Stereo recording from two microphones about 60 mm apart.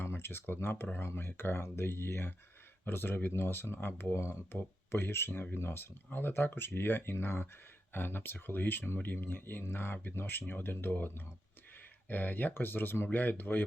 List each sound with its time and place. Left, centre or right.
0.0 s speech: left